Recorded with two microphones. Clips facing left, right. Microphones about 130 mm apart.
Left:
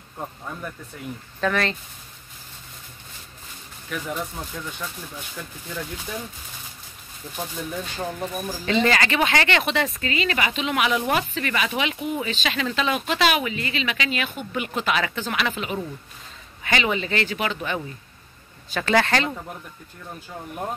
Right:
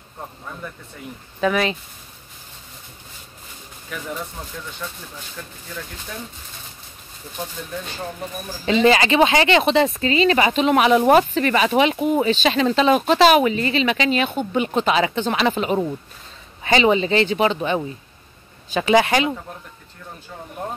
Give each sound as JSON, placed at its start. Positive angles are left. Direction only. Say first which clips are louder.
{"t": 1.4, "sound": "speech", "louder": "right 4 dB", "side_deg": -10}
{"t": 3.9, "sound": "speech", "louder": "left 1 dB", "side_deg": 0}
{"t": 8.6, "sound": "speech", "louder": "right 6 dB", "side_deg": -20}
{"t": 16.6, "sound": "speech", "louder": "right 8 dB", "side_deg": -25}